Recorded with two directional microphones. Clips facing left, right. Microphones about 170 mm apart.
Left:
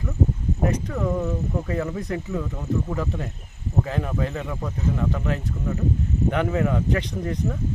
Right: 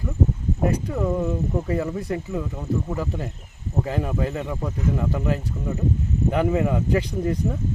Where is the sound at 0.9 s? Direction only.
15° right (ahead or behind).